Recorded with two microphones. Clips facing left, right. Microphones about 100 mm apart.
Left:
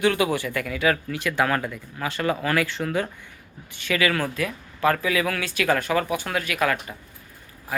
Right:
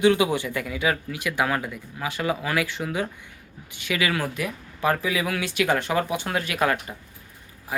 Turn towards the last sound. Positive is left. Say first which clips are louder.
# even
turn(degrees=-25)  # may be behind; listen again after turning